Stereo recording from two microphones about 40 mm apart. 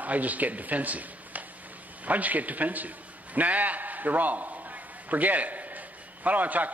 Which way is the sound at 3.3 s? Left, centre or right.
Right.